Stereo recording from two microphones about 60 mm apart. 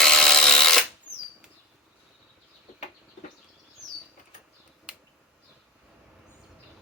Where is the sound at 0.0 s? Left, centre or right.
Centre.